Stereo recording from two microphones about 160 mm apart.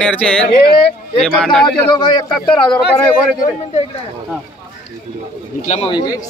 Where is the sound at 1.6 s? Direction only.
30° left (ahead or behind).